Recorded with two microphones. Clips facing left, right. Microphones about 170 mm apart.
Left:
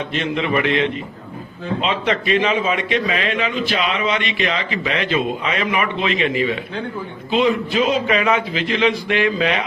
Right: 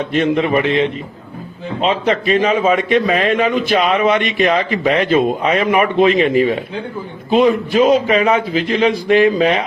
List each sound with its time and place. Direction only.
0.1 s a man's voice: 45° right (ahead or behind)